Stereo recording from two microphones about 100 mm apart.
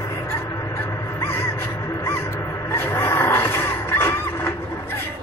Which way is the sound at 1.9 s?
25° left (ahead or behind).